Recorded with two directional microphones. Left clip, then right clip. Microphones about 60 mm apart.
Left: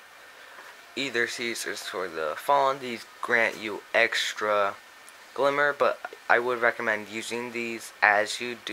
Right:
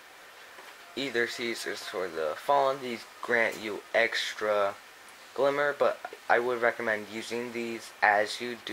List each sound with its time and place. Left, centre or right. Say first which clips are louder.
0.9 s speech: left 2 dB; left